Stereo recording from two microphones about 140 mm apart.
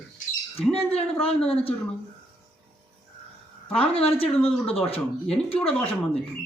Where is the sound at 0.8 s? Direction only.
45° left (ahead or behind).